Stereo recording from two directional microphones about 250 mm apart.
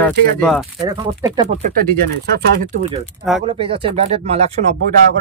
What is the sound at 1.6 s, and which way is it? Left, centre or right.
Speech, right.